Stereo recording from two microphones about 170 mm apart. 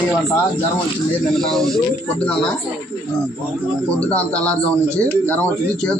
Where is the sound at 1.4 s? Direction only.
Centre (ahead or behind).